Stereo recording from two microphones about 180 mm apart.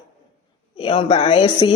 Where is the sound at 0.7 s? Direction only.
30° left (ahead or behind).